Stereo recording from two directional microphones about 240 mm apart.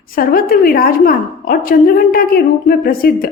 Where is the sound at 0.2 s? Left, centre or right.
Left.